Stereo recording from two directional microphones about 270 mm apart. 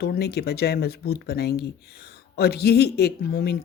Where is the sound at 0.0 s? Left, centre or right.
Left.